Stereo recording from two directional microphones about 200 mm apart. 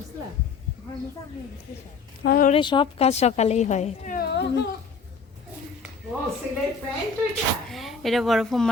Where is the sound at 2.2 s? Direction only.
45° left (ahead or behind).